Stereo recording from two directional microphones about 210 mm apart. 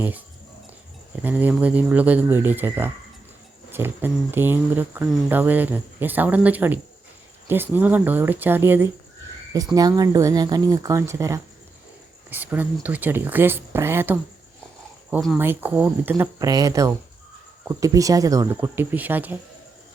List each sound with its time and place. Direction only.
1.1 s speech: 10° right (ahead or behind)
15.4 s speech: 10° right (ahead or behind)